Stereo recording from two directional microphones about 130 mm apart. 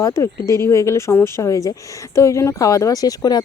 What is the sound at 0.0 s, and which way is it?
Speech, 25° left (ahead or behind).